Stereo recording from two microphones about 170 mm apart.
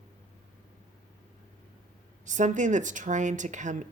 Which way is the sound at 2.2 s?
45° right (ahead or behind).